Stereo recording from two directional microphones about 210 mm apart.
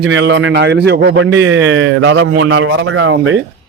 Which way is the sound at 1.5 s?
70° right (ahead or behind).